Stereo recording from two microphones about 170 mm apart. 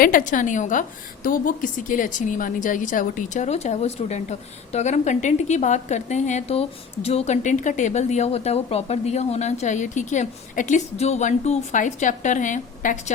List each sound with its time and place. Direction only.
0.0 s a woman's voice: 55° left (ahead or behind)